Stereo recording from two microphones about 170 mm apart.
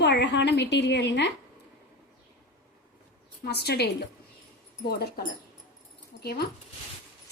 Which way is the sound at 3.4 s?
75° left (ahead or behind).